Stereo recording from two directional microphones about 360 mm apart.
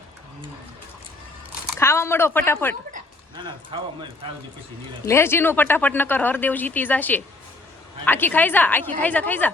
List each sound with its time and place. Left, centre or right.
1.7 s speech: centre
2.9 s a sound: centre
5.0 s speech: centre